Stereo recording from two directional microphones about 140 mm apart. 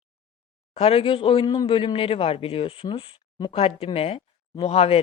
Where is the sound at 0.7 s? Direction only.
45° left (ahead or behind).